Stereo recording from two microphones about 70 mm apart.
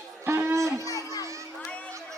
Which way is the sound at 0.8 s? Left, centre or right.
Left.